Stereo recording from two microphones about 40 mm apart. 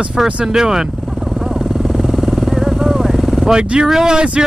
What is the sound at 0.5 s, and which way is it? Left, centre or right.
Speech, centre.